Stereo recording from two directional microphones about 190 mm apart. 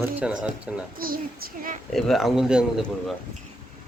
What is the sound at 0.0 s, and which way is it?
Speech, 10° right (ahead or behind).